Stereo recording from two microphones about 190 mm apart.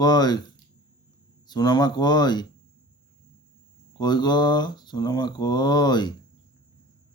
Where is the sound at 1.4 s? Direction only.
20° left (ahead or behind).